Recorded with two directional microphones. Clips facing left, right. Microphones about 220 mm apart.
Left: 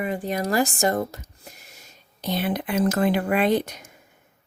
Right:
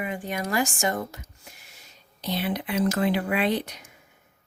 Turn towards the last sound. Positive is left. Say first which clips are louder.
# left 4 dB
turn(degrees=45)  # may be behind; listen again after turning